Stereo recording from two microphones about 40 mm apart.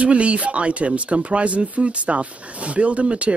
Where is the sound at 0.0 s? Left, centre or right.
Right.